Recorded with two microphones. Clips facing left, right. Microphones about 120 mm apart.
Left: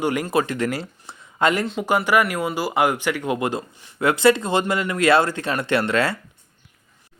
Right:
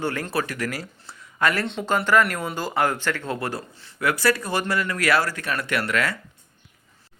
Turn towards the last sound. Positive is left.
turn(degrees=30)  # may be behind; listen again after turning